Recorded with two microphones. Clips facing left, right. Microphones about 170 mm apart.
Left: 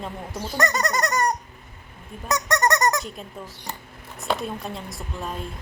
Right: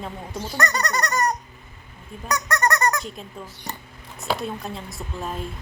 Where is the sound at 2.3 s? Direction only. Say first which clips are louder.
Left 1 dB; 25° left (ahead or behind).